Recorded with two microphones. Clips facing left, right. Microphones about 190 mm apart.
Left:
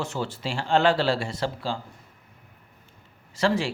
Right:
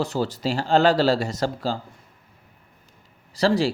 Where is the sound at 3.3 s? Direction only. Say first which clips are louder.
Right 4 dB; 35° right (ahead or behind).